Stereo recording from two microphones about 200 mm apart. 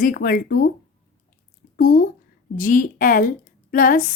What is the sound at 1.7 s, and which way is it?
Speech, 45° left (ahead or behind).